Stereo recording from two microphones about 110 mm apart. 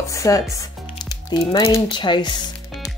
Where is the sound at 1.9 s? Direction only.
45° left (ahead or behind).